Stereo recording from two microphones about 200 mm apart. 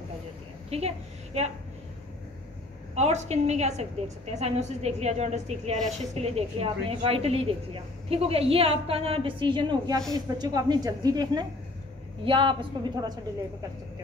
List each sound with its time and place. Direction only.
0.7 s a woman's voice: 30° right (ahead or behind)
2.9 s a woman's voice: 35° right (ahead or behind)